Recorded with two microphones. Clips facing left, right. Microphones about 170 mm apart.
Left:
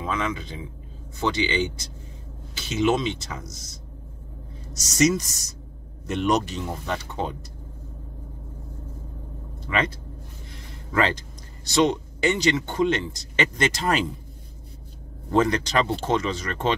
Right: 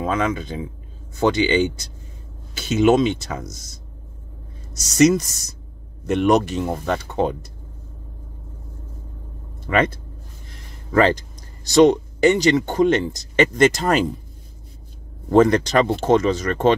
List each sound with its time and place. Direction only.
0.0 s speech: 45° right (ahead or behind)
2.7 s speech: 50° right (ahead or behind)
4.9 s speech: 55° right (ahead or behind)
9.7 s speech: 50° right (ahead or behind)
15.3 s speech: 45° right (ahead or behind)